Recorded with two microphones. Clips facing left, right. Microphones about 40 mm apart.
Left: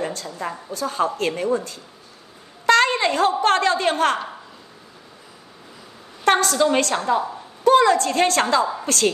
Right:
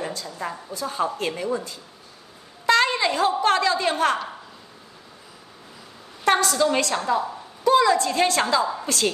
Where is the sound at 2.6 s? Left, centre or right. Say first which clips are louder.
Left 3 dB; left.